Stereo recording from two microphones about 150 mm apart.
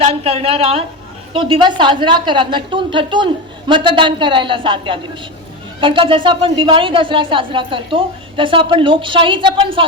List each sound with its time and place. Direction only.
0.0 s speech: 40° right (ahead or behind)